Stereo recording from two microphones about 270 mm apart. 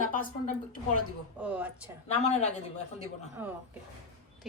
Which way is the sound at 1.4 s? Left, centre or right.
Centre.